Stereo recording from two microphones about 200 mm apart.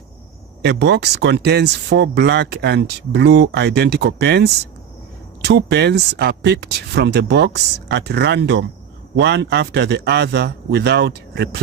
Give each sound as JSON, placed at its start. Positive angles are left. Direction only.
{"t": 0.6, "sound": "speech", "side_deg": -60}